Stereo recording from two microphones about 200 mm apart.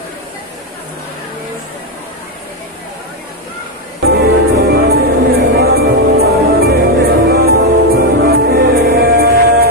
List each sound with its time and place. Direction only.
4.0 s music: 50° right (ahead or behind)